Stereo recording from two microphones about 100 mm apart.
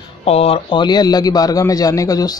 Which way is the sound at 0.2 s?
90° left.